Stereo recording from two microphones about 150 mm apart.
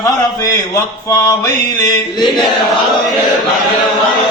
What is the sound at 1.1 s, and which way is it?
Mantra, 20° left (ahead or behind).